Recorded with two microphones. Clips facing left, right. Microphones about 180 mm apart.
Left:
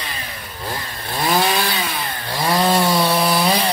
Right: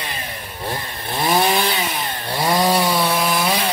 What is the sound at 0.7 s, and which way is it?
Chainsaw, 20° right (ahead or behind).